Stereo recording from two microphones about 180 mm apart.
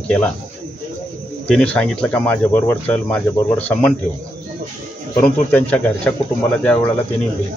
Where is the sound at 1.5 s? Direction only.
5° left (ahead or behind).